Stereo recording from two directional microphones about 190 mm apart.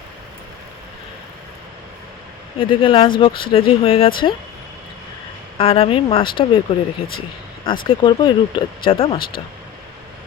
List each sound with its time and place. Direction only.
2.6 s speech: 25° left (ahead or behind)
5.5 s speech: 30° left (ahead or behind)
7.6 s speech: 25° left (ahead or behind)